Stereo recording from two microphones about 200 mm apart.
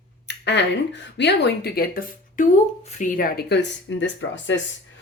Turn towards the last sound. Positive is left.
turn(degrees=65)  # may be behind; listen again after turning